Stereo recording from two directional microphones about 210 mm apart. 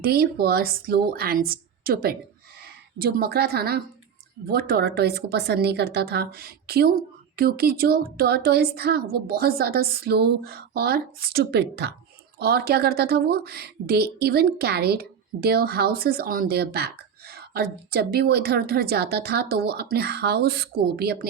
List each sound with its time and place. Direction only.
0.0 s speech: 50° right (ahead or behind)